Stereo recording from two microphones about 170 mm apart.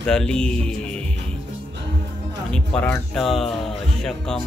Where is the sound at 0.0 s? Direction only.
5° left (ahead or behind).